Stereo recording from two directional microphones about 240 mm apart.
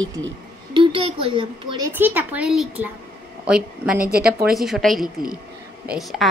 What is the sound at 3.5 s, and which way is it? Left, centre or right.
Speech, centre.